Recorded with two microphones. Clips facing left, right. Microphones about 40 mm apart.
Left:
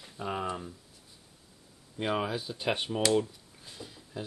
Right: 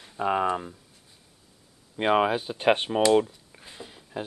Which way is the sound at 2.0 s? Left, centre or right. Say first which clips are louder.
Right 9 dB; right.